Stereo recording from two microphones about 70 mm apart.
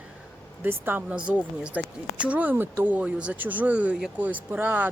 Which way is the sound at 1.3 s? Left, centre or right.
Centre.